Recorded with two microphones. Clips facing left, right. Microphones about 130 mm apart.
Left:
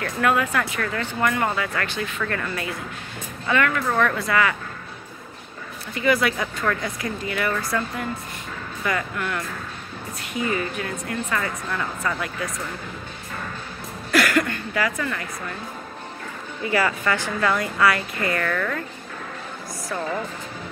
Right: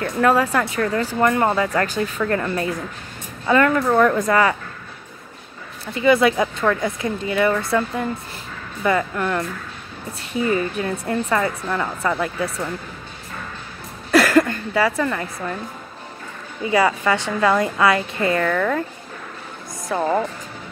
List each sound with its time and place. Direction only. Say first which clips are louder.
0.0 s speech: right 4 dB; 35° right (ahead or behind)
5.9 s a woman's voice: right 6 dB; 25° right (ahead or behind)
8.8 s speech: right 6 dB; 30° right (ahead or behind)
14.1 s speech: right 5 dB; 30° right (ahead or behind)
16.6 s a woman's voice: right 4 dB; 20° right (ahead or behind)
18.5 s speech: right 5 dB; 10° right (ahead or behind)